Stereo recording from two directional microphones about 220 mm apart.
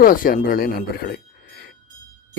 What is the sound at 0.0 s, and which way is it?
Speech, 40° left (ahead or behind).